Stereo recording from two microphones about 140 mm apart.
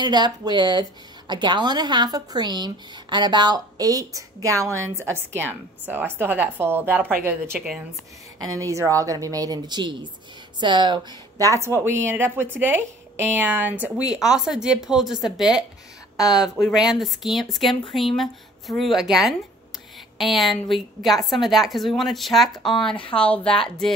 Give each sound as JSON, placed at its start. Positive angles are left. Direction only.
{"t": 0.0, "sound": "a woman's voice", "side_deg": -30}
{"t": 11.6, "sound": "a woman's voice", "side_deg": -20}